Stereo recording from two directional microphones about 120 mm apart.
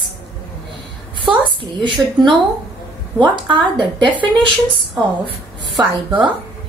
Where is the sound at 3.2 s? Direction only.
40° right (ahead or behind).